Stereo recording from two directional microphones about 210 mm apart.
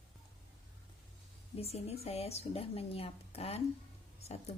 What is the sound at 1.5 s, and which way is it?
Speech, 30° left (ahead or behind).